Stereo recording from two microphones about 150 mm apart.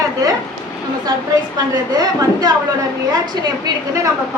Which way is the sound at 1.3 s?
25° right (ahead or behind).